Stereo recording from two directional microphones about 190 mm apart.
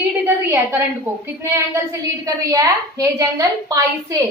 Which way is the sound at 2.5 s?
20° right (ahead or behind).